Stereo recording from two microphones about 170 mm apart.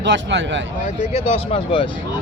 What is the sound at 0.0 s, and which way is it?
Speech, 90° right.